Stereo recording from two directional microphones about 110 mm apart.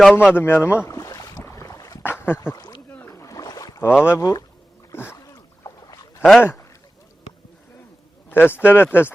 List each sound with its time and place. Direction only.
0.0 s speech: 5° right (ahead or behind)
0.3 s boat: 20° left (ahead or behind)
2.0 s speech: 20° left (ahead or behind)
2.9 s boat: 20° left (ahead or behind)
3.9 s speech: 10° right (ahead or behind)
4.2 s speech: 30° left (ahead or behind)
4.9 s speech: 20° left (ahead or behind)
5.2 s boat: 30° left (ahead or behind)
8.3 s speech: 20° left (ahead or behind)